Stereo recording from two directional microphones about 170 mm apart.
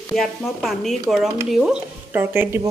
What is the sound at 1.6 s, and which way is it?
Speech, 10° right (ahead or behind).